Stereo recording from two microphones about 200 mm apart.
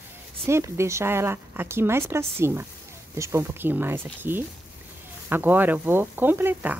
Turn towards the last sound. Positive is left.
turn(degrees=-10)  # may be behind; listen again after turning